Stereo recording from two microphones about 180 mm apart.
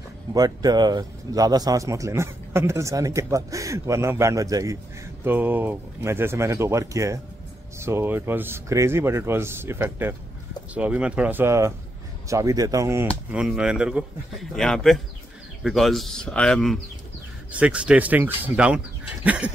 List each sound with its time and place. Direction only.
0.3 s a man's voice: 20° right (ahead or behind)
13.3 s speech: 5° right (ahead or behind)
17.5 s a man's voice: 5° right (ahead or behind)